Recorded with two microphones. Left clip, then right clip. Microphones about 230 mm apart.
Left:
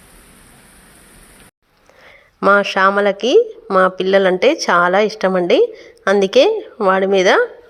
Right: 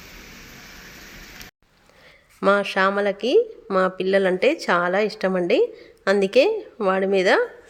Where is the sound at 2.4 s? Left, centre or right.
Centre.